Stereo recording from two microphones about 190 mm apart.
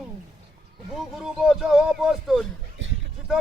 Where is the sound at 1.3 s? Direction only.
Centre (ahead or behind).